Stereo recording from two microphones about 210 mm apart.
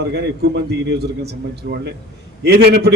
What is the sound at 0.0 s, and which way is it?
A man's voice, 50° right (ahead or behind).